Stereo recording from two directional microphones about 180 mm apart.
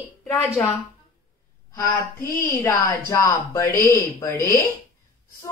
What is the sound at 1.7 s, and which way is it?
A woman's voice, 20° left (ahead or behind).